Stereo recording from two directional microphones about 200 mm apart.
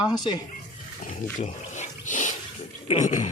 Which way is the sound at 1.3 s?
35° left (ahead or behind).